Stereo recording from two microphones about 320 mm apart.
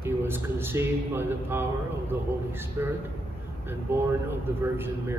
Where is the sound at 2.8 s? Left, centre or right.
Centre.